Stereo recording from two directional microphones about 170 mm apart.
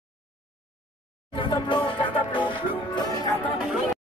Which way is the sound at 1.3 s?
30° left (ahead or behind).